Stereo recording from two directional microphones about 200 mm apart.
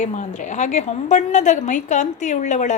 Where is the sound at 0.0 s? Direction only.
35° left (ahead or behind).